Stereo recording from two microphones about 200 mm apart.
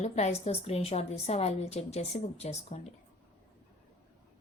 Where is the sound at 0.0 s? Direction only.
35° left (ahead or behind).